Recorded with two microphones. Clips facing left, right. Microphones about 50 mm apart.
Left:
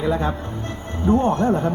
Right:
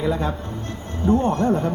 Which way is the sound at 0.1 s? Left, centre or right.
Left.